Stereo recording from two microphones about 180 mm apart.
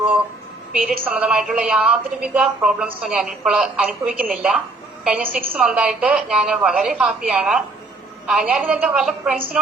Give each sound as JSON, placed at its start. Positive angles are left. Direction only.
{"t": 0.7, "sound": "a woman's voice", "side_deg": -5}
{"t": 5.2, "sound": "a woman's voice", "side_deg": -50}
{"t": 5.5, "sound": "a woman's voice", "side_deg": -5}